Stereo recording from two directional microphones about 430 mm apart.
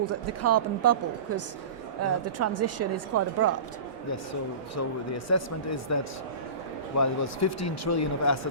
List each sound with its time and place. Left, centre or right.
0.0 s a woman's voice: right
2.0 s a woman's voice: right
4.7 s speech: left